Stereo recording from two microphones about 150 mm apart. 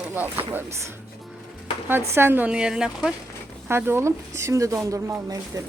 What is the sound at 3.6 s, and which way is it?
Speech, 15° right (ahead or behind).